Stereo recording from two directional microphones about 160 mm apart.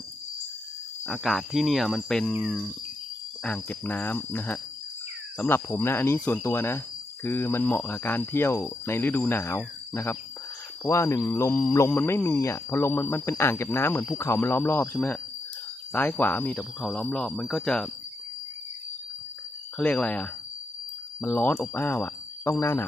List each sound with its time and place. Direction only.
1.0 s speech: centre (ahead or behind)
3.4 s speech: 10° left (ahead or behind)
19.8 s speech: 10° left (ahead or behind)